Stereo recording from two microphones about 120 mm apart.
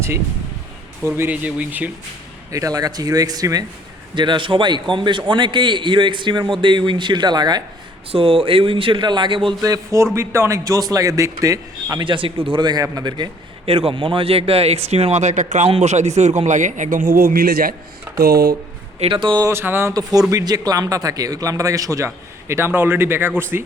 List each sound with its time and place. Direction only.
1.1 s speech: 15° right (ahead or behind)
2.5 s a man's voice: 30° right (ahead or behind)
4.1 s a man's voice: 40° right (ahead or behind)
8.1 s speech: 50° right (ahead or behind)
9.6 s a man's voice: 30° right (ahead or behind)
12.0 s a man's voice: 45° right (ahead or behind)
13.7 s speech: 50° right (ahead or behind); by 15.7 s 90° right
15.7 s a man's voice: 70° right (ahead or behind); by 17.1 s 90° right
18.9 s speech: 50° right (ahead or behind)
19.5 s a man's voice: 20° right (ahead or behind)
19.9 s a man's voice: 30° right (ahead or behind)